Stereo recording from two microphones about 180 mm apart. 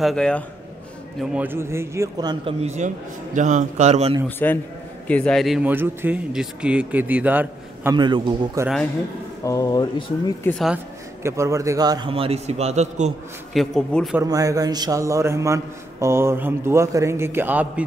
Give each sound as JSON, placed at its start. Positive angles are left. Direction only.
{"t": 0.0, "sound": "a man's voice", "side_deg": 5}
{"t": 1.3, "sound": "a man's voice", "side_deg": -10}
{"t": 2.6, "sound": "a man's voice", "side_deg": -40}
{"t": 4.4, "sound": "a man's voice", "side_deg": 10}
{"t": 7.9, "sound": "a man's voice", "side_deg": -25}
{"t": 9.4, "sound": "speech", "side_deg": 20}
{"t": 11.2, "sound": "a man's voice", "side_deg": -15}
{"t": 13.5, "sound": "a man's voice", "side_deg": 0}
{"t": 14.2, "sound": "a man's voice", "side_deg": -20}